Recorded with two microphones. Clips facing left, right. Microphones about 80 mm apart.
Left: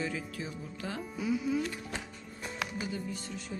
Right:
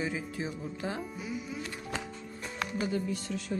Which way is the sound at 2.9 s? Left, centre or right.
Right.